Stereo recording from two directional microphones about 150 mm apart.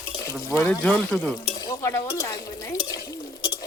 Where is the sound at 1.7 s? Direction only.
20° left (ahead or behind).